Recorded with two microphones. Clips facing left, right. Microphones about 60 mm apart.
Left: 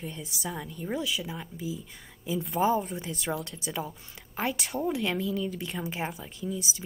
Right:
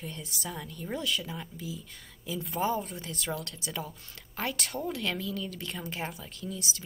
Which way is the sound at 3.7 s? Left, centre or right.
Centre.